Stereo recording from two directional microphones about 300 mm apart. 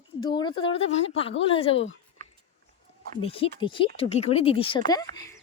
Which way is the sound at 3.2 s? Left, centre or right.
Centre.